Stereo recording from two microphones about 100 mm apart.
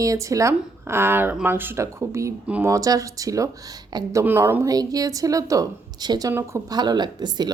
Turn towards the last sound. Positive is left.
turn(degrees=-45)  # may be behind; listen again after turning